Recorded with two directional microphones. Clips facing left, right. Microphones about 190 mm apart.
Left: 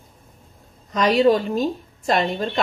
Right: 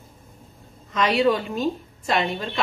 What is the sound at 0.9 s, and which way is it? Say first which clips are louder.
Speech: left 4 dB; 40° left (ahead or behind).